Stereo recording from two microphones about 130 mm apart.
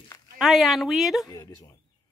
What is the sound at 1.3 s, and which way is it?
Speech, 30° left (ahead or behind).